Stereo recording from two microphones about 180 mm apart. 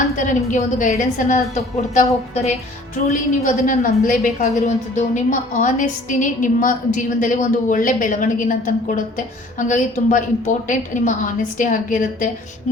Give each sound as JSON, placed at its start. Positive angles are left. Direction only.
{"t": 0.2, "sound": "a woman's voice", "side_deg": 45}